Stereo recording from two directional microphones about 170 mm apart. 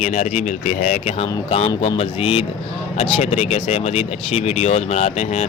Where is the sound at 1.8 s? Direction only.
35° left (ahead or behind).